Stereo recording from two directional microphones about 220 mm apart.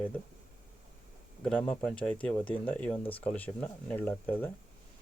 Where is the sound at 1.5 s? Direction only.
5° left (ahead or behind).